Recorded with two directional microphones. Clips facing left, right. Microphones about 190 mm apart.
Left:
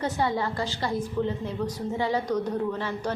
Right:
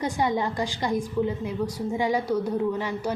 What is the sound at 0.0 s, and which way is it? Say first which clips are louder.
A woman's voice: right 1 dB; 15° right (ahead or behind).